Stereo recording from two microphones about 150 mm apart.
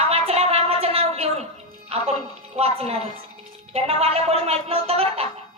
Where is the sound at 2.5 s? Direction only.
40° right (ahead or behind).